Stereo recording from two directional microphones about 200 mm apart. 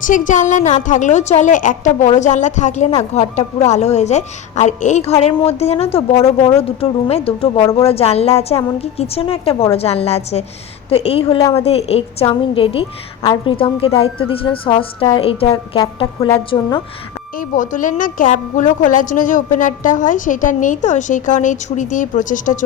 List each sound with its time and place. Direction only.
0.0 s a woman's voice: 40° left (ahead or behind); by 16.8 s 20° left (ahead or behind)
17.5 s a woman's voice: 40° left (ahead or behind)